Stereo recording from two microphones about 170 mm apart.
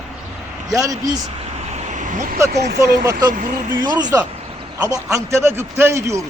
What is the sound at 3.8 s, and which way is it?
A man's voice, 25° right (ahead or behind).